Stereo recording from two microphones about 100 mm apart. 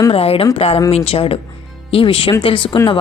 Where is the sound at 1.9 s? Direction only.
65° left (ahead or behind).